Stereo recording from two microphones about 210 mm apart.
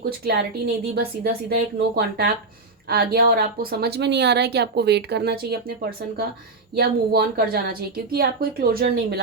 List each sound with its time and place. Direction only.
0.9 s a woman's voice: 50° right (ahead or behind)